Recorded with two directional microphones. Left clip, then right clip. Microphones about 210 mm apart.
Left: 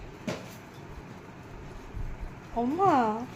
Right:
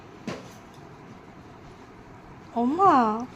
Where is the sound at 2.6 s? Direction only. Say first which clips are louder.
Right 5 dB; 50° right (ahead or behind).